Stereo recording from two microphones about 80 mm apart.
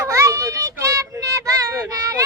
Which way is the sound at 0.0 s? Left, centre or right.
Right.